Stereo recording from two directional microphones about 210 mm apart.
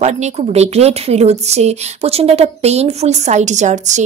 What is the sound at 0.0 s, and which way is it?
Speech, 30° right (ahead or behind).